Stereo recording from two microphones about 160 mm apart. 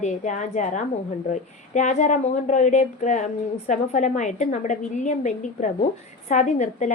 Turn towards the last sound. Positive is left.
turn(degrees=50)  # may be behind; listen again after turning